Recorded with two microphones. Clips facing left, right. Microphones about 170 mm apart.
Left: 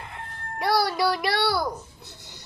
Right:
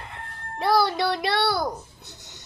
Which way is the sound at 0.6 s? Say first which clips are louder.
Right 2 dB; 25° right (ahead or behind).